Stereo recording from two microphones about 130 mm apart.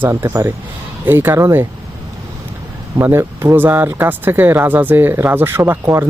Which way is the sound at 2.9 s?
20° right (ahead or behind).